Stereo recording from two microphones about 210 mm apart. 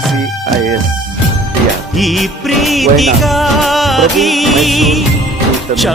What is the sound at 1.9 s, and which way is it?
Music, centre (ahead or behind).